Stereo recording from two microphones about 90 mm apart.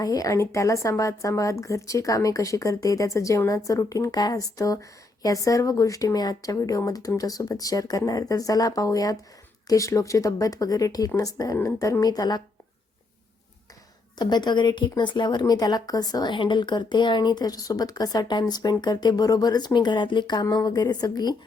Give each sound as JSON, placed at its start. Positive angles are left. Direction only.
{"t": 0.0, "sound": "a woman's voice", "side_deg": 40}
{"t": 14.2, "sound": "a woman's voice", "side_deg": 55}
{"t": 20.5, "sound": "a woman's voice", "side_deg": 40}